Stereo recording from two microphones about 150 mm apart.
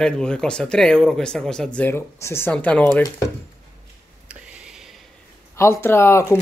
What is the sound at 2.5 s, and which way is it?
Speech, 5° left (ahead or behind).